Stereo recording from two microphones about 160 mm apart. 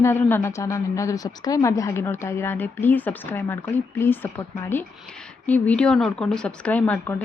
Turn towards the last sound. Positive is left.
turn(degrees=10)  # may be behind; listen again after turning